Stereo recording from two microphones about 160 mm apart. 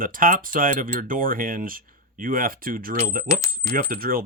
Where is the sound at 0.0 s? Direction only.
60° right (ahead or behind).